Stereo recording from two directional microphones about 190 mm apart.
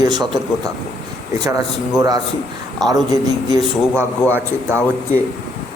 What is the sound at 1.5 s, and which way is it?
A man's voice, 15° right (ahead or behind).